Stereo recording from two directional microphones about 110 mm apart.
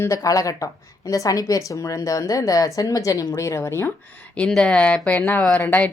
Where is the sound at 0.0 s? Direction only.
30° left (ahead or behind).